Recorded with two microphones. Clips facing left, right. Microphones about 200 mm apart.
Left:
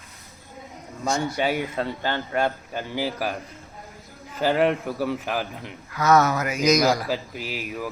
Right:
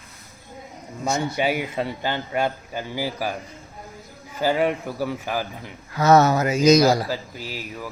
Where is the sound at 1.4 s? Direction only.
10° right (ahead or behind).